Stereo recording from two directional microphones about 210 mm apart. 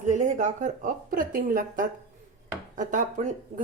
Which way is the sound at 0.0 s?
35° right (ahead or behind).